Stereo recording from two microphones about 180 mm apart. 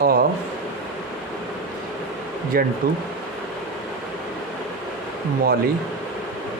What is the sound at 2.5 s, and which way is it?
Speech, 55° right (ahead or behind).